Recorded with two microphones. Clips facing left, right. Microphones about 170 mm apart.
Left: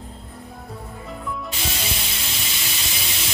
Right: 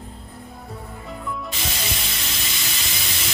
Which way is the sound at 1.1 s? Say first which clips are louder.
Even; centre (ahead or behind).